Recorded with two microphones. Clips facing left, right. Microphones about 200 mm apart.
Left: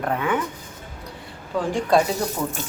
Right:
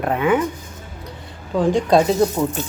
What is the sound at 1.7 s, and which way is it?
Speech, 20° right (ahead or behind).